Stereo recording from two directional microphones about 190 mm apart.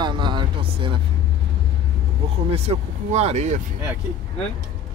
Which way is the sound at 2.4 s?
35° right (ahead or behind).